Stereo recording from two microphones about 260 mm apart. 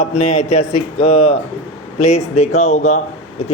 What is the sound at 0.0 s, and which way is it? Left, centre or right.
Speech, left.